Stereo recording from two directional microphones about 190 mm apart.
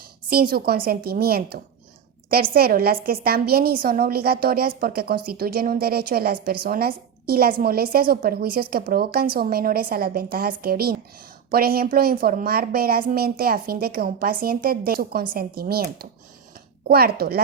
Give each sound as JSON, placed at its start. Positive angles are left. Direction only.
{"t": 0.5, "sound": "a woman's voice", "side_deg": -55}